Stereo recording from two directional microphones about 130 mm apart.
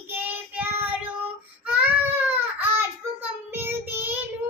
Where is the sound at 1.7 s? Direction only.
15° right (ahead or behind).